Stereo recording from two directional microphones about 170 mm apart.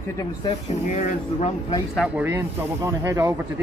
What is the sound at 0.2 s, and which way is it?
Speech, 25° left (ahead or behind).